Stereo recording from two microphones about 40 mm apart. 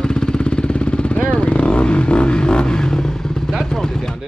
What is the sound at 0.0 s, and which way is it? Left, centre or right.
Vehicle, centre.